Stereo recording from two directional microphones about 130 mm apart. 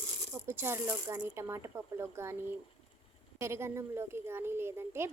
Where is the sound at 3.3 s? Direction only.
20° right (ahead or behind).